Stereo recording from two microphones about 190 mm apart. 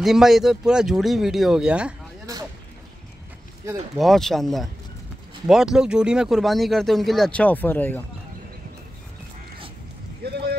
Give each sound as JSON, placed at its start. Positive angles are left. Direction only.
{"t": 0.0, "sound": "speech", "side_deg": 0}
{"t": 2.3, "sound": "a sound", "side_deg": -20}
{"t": 3.9, "sound": "speech", "side_deg": 0}
{"t": 10.2, "sound": "vehicle", "side_deg": -60}